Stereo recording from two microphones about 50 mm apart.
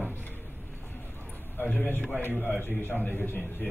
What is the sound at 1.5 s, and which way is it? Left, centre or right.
A man's voice, left.